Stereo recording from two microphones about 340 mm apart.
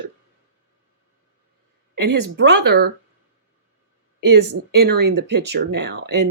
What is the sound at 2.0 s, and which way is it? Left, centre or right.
Speech, right.